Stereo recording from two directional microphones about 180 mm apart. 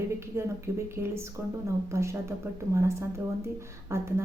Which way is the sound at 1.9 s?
15° right (ahead or behind).